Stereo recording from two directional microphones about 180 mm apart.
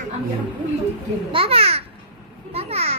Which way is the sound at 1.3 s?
30° right (ahead or behind).